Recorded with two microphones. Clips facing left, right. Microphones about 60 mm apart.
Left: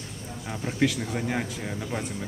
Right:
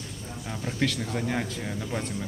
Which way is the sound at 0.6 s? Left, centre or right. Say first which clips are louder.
Left 3 dB; centre.